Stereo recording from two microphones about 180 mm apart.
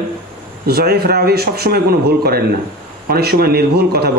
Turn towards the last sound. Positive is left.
turn(degrees=-60)  # may be behind; listen again after turning